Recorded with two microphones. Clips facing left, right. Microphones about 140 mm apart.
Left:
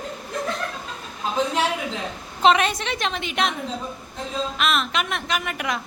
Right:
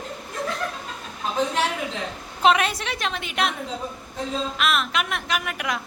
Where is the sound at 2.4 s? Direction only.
5° right (ahead or behind).